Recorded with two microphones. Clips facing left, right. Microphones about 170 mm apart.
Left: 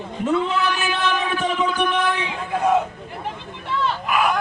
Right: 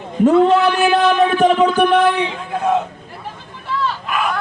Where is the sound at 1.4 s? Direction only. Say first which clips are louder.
Right 9 dB; 60° right (ahead or behind).